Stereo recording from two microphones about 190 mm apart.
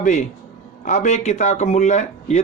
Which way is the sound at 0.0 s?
40° left (ahead or behind).